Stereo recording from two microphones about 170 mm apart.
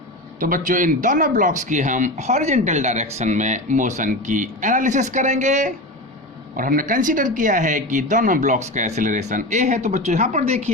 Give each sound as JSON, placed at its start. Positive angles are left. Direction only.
{"t": 0.3, "sound": "speech", "side_deg": -55}